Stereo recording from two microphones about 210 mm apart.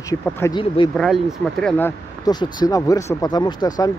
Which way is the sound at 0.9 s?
Centre (ahead or behind).